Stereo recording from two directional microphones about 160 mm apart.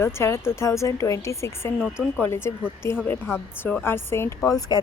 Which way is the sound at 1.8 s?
5° right (ahead or behind).